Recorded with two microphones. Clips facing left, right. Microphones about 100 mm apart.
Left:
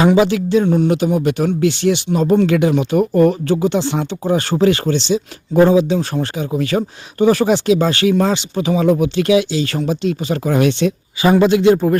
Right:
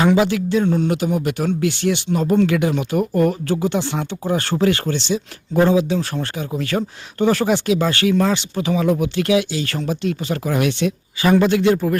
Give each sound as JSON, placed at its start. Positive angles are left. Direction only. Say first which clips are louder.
{"t": 0.0, "sound": "speech", "louder": "left 3 dB", "side_deg": 20}
{"t": 11.2, "sound": "speech", "louder": "left 3 dB", "side_deg": 20}